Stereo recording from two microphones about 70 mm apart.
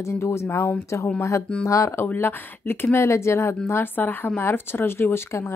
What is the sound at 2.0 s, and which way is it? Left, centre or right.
Speech, left.